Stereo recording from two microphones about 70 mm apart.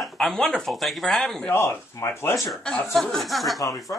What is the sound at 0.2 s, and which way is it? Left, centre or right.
A man's voice, centre.